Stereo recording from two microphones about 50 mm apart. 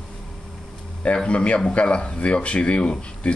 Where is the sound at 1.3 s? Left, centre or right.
Left.